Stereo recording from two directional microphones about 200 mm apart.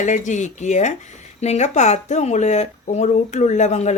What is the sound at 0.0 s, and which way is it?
Speech, 35° left (ahead or behind).